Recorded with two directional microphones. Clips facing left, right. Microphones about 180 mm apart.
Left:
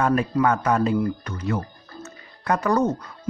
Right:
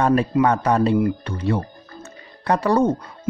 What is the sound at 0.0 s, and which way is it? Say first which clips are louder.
Speech: right 3 dB; 35° right (ahead or behind).